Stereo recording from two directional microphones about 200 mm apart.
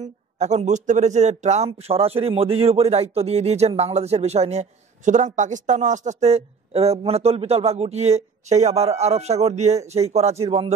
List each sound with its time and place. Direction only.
0.0 s a man's voice: 35° right (ahead or behind)